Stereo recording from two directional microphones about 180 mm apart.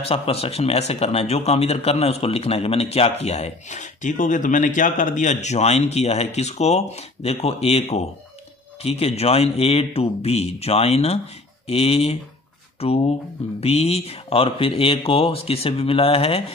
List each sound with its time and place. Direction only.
0.0 s speech: 35° left (ahead or behind)